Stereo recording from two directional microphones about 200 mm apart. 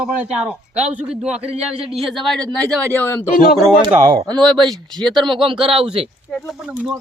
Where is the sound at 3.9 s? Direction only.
15° right (ahead or behind).